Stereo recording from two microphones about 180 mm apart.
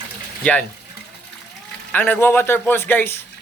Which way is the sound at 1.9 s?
10° left (ahead or behind).